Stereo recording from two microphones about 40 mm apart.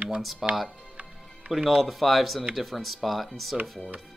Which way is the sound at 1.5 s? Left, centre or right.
Centre.